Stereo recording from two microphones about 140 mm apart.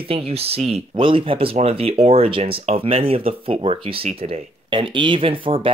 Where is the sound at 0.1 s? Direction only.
45° right (ahead or behind).